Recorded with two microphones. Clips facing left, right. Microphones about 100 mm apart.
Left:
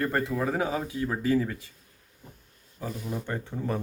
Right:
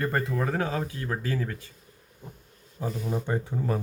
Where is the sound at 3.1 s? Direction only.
15° right (ahead or behind).